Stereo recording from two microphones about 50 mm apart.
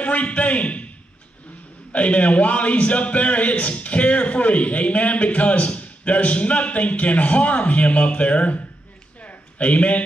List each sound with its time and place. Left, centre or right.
0.0 s a man's voice: left
1.9 s a man's voice: left
9.2 s a sound: left